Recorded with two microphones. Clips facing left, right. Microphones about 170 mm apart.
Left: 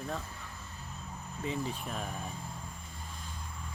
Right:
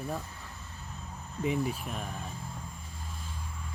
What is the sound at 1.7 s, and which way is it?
Speech, 5° right (ahead or behind).